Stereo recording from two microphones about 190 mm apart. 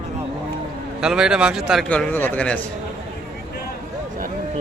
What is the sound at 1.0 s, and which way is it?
A man's voice, 5° right (ahead or behind).